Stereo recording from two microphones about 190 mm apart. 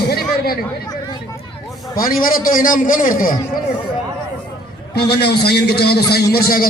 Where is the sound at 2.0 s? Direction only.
50° left (ahead or behind).